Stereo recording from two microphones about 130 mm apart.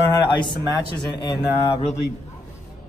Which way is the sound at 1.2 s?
30° left (ahead or behind).